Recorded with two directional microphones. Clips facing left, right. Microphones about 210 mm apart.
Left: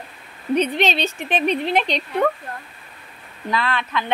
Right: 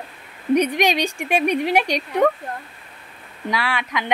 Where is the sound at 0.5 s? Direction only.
15° right (ahead or behind).